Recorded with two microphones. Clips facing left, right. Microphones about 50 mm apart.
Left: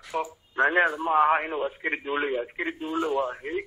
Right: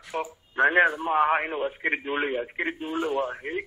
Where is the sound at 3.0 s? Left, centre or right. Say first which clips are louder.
Even; centre.